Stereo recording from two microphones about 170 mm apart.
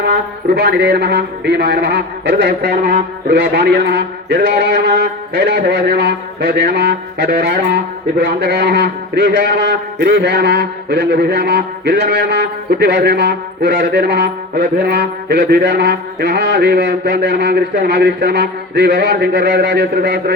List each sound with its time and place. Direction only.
0.1 s a man's voice: 75° right (ahead or behind)